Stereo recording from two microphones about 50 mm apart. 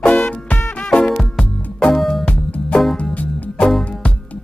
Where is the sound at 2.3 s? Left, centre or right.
Left.